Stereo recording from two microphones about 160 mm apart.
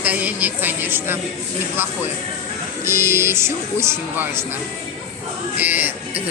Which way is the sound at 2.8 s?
15° right (ahead or behind).